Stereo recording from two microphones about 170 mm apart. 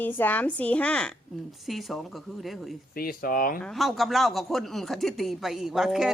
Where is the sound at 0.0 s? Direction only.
10° left (ahead or behind).